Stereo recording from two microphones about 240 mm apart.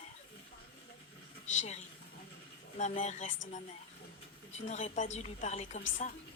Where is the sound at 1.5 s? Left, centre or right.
Left.